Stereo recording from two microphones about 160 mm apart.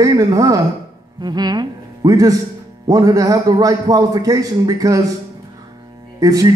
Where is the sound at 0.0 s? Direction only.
20° right (ahead or behind).